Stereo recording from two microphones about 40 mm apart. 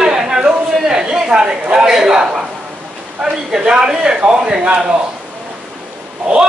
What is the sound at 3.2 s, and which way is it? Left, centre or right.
A man's voice, centre.